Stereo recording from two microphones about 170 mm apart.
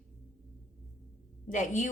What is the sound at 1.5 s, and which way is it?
Speech, 50° left (ahead or behind).